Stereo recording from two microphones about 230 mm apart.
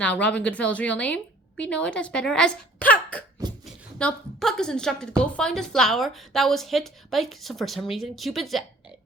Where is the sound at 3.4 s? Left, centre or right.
Centre.